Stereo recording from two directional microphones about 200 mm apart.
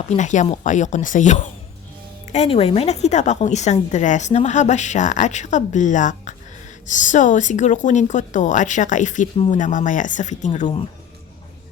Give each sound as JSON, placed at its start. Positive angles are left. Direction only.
{"t": 0.2, "sound": "a woman's voice", "side_deg": 35}